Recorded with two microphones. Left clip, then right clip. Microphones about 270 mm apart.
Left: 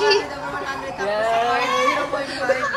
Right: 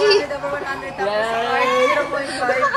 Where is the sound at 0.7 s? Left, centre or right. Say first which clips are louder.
Even; right.